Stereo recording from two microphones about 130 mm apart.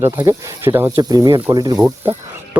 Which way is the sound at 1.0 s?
30° right (ahead or behind).